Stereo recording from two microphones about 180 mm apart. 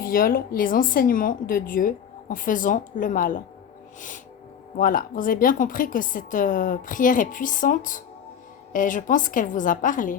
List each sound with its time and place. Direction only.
0.0 s speech: 55° left (ahead or behind)
4.8 s speech: 50° left (ahead or behind)